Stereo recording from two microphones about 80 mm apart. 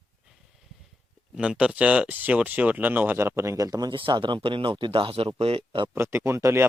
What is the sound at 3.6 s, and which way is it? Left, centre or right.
Speech, right.